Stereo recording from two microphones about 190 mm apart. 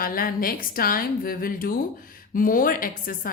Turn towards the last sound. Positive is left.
turn(degrees=50)  # may be behind; listen again after turning